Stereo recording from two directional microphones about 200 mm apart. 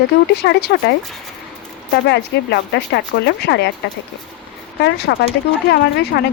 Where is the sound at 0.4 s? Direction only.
60° left (ahead or behind).